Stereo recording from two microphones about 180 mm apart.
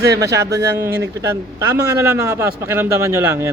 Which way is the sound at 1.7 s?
15° right (ahead or behind).